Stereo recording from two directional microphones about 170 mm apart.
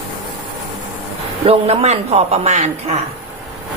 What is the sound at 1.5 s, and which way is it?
A man's voice, 35° right (ahead or behind).